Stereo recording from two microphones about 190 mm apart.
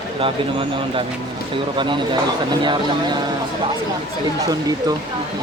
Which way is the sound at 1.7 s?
25° right (ahead or behind).